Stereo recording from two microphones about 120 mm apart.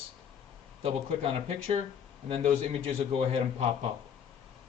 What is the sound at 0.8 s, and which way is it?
Speech, 55° right (ahead or behind).